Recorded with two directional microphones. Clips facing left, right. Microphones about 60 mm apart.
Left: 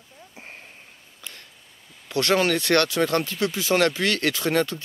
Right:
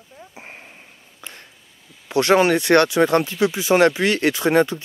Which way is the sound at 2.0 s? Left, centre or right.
Right.